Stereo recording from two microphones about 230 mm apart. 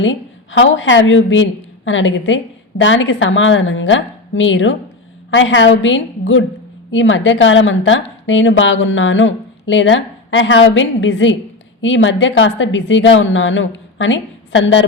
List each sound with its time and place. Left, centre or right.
0.0 s a woman's voice: left